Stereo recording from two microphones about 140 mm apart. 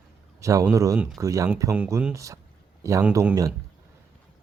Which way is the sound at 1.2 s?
20° right (ahead or behind).